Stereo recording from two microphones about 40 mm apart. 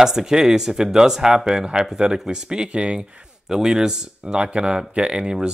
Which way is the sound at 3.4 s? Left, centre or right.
Centre.